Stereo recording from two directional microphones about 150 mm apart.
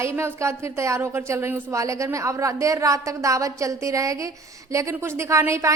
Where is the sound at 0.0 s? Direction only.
20° right (ahead or behind).